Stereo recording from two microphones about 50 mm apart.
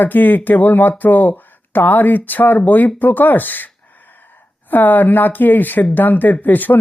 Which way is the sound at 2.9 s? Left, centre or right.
Left.